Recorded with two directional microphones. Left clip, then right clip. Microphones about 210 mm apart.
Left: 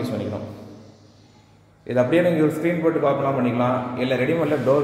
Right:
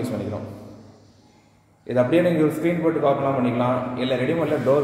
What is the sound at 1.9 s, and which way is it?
A man's voice, centre (ahead or behind).